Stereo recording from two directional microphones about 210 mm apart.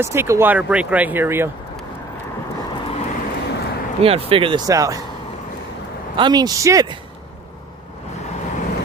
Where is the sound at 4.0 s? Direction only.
25° right (ahead or behind).